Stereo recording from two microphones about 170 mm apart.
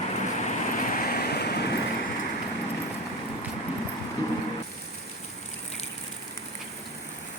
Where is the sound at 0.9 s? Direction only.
60° left (ahead or behind).